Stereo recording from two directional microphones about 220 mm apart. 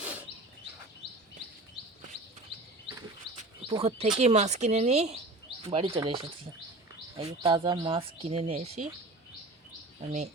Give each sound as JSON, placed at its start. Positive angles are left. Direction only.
{"t": 0.0, "sound": "a sound", "side_deg": -5}
{"t": 3.7, "sound": "speech", "side_deg": -25}
{"t": 7.2, "sound": "speech", "side_deg": -20}
{"t": 10.0, "sound": "speech", "side_deg": -30}